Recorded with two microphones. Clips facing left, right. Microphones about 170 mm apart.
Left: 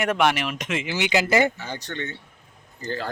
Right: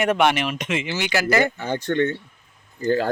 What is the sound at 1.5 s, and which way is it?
Speech, 50° right (ahead or behind).